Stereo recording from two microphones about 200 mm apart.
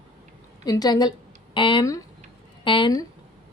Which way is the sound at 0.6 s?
20° left (ahead or behind).